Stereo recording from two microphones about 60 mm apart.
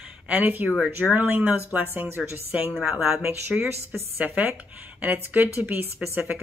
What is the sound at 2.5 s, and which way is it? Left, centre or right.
Speech, right.